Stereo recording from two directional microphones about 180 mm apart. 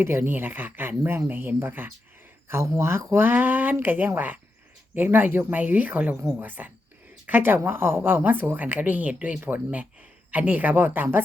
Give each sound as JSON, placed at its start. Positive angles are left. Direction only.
{"t": 0.0, "sound": "speech", "side_deg": -15}